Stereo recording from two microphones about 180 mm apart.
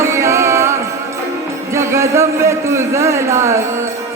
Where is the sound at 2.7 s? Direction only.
15° right (ahead or behind).